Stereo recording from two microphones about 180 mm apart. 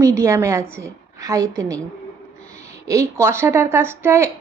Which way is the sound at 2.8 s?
15° right (ahead or behind).